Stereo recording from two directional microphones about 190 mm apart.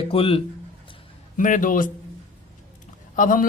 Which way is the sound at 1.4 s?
40° left (ahead or behind).